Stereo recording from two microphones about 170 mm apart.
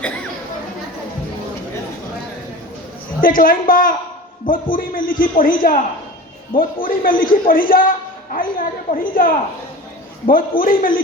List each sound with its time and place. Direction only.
3.2 s a man's voice: 55° left (ahead or behind)